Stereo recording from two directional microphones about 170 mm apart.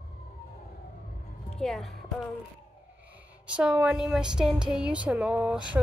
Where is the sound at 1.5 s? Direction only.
Centre (ahead or behind).